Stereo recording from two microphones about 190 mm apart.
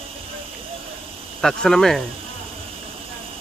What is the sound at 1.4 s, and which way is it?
Speech, centre (ahead or behind).